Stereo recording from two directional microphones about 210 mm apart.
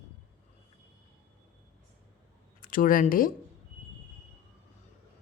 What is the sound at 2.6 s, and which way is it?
Speech, 40° left (ahead or behind).